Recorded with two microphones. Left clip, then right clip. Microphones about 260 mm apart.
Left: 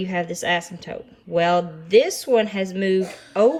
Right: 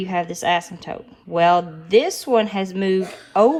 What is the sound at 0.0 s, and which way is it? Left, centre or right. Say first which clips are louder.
Speech: right 3 dB; centre.